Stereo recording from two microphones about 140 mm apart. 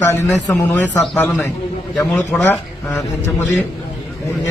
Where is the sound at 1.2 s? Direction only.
Centre (ahead or behind).